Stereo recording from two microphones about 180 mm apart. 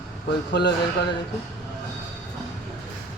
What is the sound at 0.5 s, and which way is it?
Speech, 70° left (ahead or behind).